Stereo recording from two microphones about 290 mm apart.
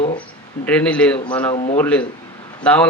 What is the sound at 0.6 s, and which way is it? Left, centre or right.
Speech, centre.